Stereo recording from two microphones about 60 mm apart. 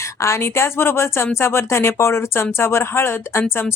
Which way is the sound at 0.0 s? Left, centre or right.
Left.